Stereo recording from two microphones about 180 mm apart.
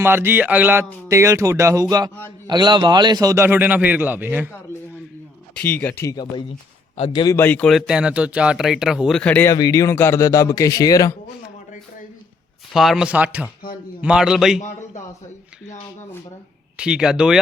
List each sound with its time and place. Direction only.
0.0 s a man's voice: 10° right (ahead or behind)
5.5 s speech: 10° left (ahead or behind)
7.3 s speech: 10° left (ahead or behind)
12.7 s speech: centre (ahead or behind)
14.6 s a sound: 40° left (ahead or behind)
16.7 s speech: 5° right (ahead or behind)